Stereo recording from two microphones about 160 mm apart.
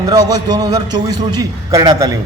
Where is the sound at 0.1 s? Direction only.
25° right (ahead or behind).